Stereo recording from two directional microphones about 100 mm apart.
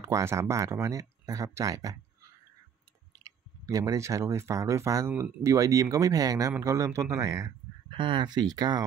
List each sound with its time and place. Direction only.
0.0 s speech: 30° right (ahead or behind)
3.7 s speech: 35° right (ahead or behind)
7.9 s speech: 55° right (ahead or behind)